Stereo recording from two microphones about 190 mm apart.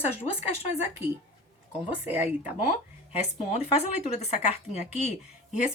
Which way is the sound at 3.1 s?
35° left (ahead or behind).